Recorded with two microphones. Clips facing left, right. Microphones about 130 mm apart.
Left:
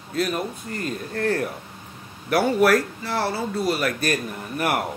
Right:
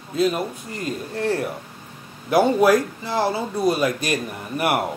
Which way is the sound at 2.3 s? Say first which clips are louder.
Right 2 dB; 20° right (ahead or behind).